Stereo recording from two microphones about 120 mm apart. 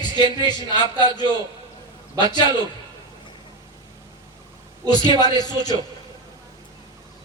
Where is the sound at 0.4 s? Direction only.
35° left (ahead or behind).